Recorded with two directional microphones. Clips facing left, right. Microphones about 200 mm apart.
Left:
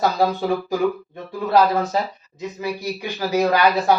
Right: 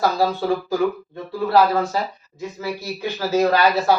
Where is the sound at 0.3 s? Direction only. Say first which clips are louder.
Even; 15° left (ahead or behind).